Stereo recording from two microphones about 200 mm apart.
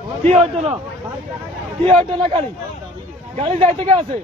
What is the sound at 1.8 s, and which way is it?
Speech, 25° right (ahead or behind).